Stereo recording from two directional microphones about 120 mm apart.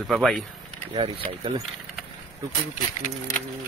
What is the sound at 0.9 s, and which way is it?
Speech, 50° right (ahead or behind).